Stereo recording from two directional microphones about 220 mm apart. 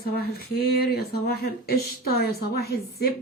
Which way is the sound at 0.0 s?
45° left (ahead or behind).